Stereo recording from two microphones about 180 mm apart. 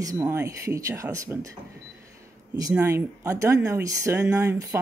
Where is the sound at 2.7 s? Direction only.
10° right (ahead or behind).